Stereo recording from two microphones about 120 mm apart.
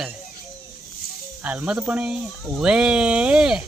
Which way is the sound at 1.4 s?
10° right (ahead or behind).